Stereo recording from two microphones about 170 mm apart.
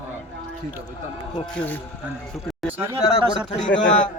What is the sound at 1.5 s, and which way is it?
Speech, 10° left (ahead or behind).